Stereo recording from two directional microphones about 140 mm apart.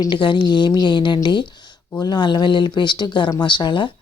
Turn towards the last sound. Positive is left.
turn(degrees=35)  # may be behind; listen again after turning